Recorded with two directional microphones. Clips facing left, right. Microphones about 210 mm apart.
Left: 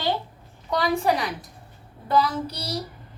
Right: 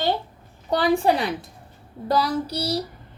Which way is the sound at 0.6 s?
30° right (ahead or behind).